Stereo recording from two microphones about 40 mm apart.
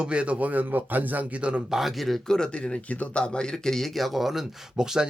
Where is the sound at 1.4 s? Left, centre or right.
Right.